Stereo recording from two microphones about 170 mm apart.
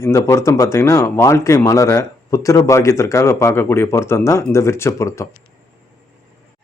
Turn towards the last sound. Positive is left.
turn(degrees=15)  # may be behind; listen again after turning